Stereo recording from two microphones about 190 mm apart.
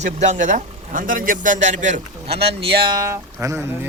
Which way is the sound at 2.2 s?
60° right (ahead or behind).